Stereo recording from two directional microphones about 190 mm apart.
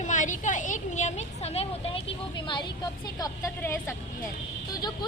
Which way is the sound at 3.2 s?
20° left (ahead or behind).